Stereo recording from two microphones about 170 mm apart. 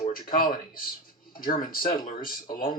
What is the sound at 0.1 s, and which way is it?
Speech, 55° left (ahead or behind).